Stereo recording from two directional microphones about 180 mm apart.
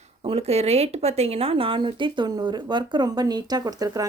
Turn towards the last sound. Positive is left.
turn(degrees=-20)  # may be behind; listen again after turning